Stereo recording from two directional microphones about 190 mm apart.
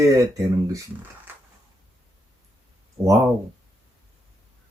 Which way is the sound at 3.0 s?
30° right (ahead or behind).